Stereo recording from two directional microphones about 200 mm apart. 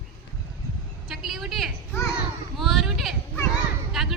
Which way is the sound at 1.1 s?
Centre (ahead or behind).